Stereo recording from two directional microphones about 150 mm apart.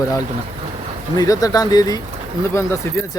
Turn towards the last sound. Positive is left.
turn(degrees=15)  # may be behind; listen again after turning